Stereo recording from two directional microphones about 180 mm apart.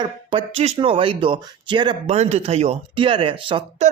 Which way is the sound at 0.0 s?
25° right (ahead or behind).